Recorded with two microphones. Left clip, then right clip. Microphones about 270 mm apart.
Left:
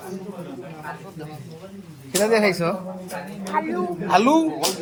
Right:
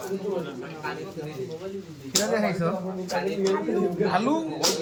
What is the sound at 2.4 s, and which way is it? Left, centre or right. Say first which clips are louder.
Speech: left 6 dB; left.